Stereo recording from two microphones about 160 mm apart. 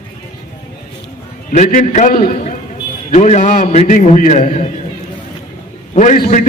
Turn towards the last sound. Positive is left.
turn(degrees=50)  # may be behind; listen again after turning